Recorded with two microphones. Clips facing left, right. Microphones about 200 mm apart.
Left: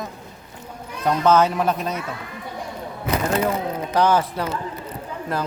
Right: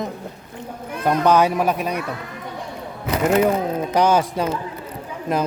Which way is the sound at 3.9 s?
15° right (ahead or behind).